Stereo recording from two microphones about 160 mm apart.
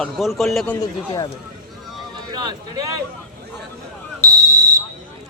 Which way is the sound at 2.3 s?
25° right (ahead or behind).